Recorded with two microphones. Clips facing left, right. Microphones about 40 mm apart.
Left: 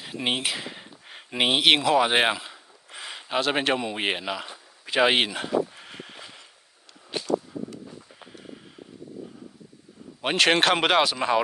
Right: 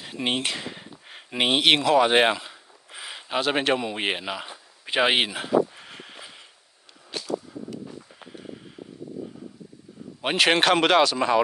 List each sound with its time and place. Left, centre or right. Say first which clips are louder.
0.0 s speech: even; centre
5.0 s a sound: left 1 dB; centre
7.1 s whip: left 3 dB; left
10.2 s speech: even; centre